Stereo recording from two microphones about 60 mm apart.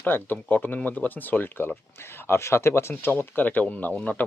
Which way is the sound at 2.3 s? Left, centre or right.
Left.